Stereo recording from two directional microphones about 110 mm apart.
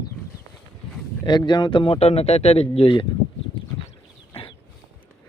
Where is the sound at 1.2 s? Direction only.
40° left (ahead or behind); by 3.0 s 60° left (ahead or behind).